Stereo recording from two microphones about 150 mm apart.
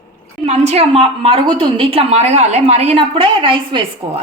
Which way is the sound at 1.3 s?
35° right (ahead or behind).